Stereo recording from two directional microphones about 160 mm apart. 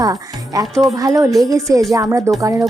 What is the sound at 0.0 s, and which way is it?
Speech, 20° right (ahead or behind).